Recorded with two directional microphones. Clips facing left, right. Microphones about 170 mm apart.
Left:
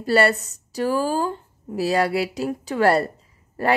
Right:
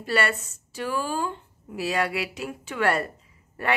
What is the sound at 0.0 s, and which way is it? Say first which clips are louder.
Speech: left 7 dB; 40° left (ahead or behind).